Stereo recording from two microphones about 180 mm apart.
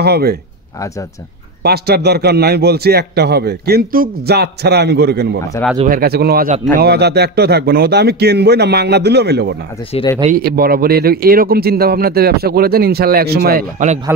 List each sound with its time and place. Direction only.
0.0 s a man's voice: 60° right (ahead or behind)
1.6 s a man's voice: 60° right (ahead or behind)
10.3 s a man's voice: 55° right (ahead or behind)